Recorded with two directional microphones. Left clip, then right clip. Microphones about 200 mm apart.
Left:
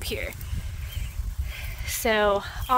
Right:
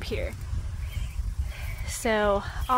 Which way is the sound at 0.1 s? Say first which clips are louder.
Right 1 dB; 45° left (ahead or behind).